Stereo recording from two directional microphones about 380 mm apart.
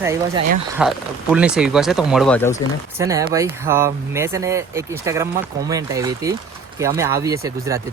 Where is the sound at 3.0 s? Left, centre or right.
Centre.